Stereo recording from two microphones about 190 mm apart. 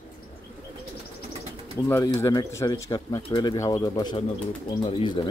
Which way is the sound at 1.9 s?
15° left (ahead or behind).